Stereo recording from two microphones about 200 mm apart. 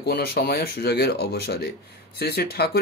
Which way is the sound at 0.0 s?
50° left (ahead or behind).